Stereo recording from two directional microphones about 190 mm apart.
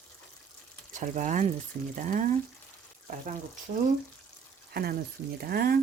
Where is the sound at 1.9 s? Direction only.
45° right (ahead or behind).